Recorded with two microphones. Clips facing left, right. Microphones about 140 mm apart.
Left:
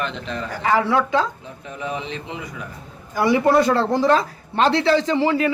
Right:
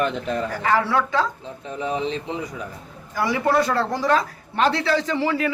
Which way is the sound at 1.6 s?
30° right (ahead or behind).